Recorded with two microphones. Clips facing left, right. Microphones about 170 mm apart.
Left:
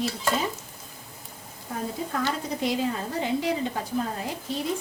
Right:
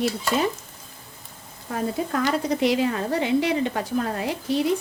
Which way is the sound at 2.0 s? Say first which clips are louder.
Right 5 dB; 90° right.